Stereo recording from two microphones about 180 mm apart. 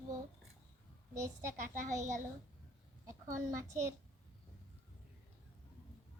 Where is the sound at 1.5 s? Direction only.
45° right (ahead or behind).